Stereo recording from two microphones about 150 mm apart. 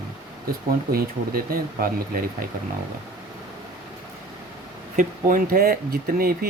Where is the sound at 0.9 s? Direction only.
85° right.